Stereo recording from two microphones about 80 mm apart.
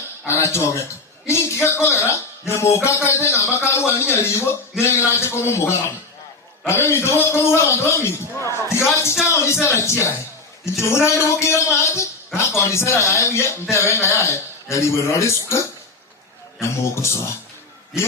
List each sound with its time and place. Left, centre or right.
0.3 s a man's voice: left
16.6 s a man's voice: left